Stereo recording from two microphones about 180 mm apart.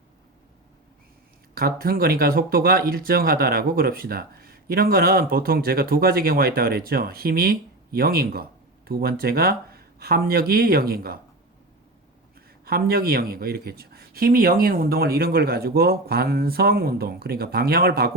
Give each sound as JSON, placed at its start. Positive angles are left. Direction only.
{"t": 1.5, "sound": "speech", "side_deg": -55}
{"t": 12.6, "sound": "speech", "side_deg": -55}